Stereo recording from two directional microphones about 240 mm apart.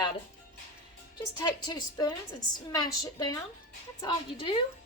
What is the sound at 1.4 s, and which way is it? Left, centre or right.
A woman's voice, centre.